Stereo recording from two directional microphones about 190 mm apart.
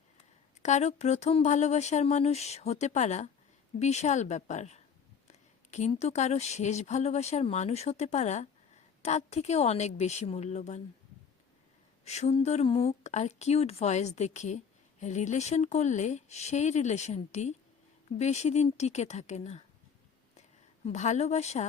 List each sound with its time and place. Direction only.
0.6 s speech: 35° left (ahead or behind)
12.0 s speech: 35° left (ahead or behind)
20.8 s speech: 40° left (ahead or behind)